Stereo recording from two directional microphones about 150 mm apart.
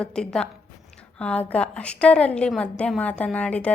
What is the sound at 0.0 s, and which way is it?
A woman's voice, 5° left (ahead or behind).